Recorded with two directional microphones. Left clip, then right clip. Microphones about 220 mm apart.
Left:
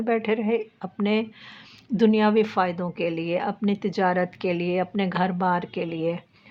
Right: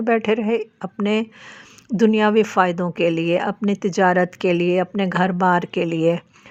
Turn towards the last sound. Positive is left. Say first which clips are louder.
# right 8 dB
turn(degrees=-35)  # may be behind; listen again after turning